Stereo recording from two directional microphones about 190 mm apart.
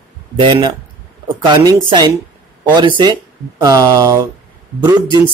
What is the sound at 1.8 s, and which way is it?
Speech, 25° right (ahead or behind).